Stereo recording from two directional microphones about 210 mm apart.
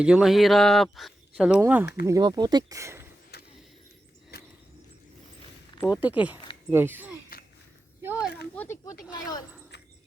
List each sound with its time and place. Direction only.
0.0 s speech: 5° right (ahead or behind)
3.3 s vehicle: 50° left (ahead or behind)
4.3 s a sound: 50° left (ahead or behind)
5.9 s speech: 5° right (ahead or behind)
8.5 s speech: 10° left (ahead or behind)